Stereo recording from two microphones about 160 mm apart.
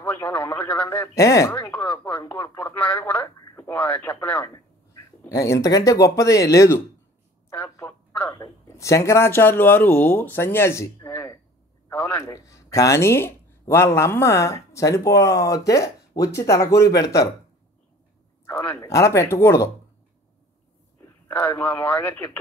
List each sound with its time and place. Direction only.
0.0 s speech: 10° left (ahead or behind)
5.3 s speech: 20° left (ahead or behind)
7.4 s a sound: 15° left (ahead or behind)
8.4 s a man's voice: 20° left (ahead or behind)
18.4 s speech: 15° left (ahead or behind)
21.3 s speech: 10° left (ahead or behind)